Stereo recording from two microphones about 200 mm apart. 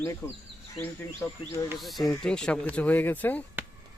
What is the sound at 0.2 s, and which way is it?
Speech, 15° left (ahead or behind).